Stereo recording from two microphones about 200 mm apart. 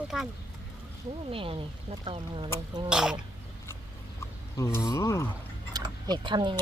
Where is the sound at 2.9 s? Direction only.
5° right (ahead or behind).